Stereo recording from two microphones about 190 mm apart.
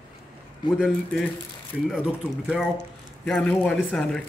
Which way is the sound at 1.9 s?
5° right (ahead or behind).